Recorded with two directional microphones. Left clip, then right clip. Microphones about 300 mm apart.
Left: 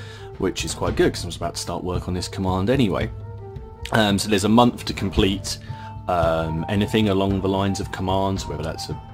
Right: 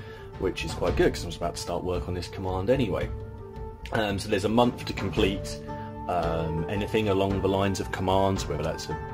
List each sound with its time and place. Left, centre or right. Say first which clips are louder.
0.4 s speech: left 4 dB; centre